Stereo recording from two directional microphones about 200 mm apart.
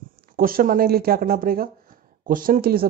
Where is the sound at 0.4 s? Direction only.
45° right (ahead or behind).